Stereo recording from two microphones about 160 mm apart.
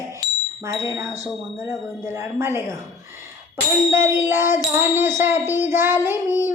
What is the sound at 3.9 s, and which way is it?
Child singing, 15° right (ahead or behind).